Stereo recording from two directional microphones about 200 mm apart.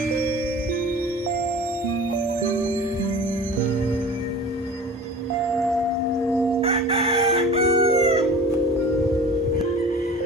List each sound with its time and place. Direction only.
6.6 s crowing: 25° right (ahead or behind)